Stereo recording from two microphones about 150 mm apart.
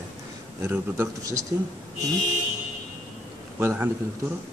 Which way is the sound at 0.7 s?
20° right (ahead or behind).